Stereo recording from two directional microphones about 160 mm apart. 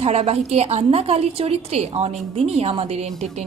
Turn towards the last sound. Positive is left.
turn(degrees=-40)  # may be behind; listen again after turning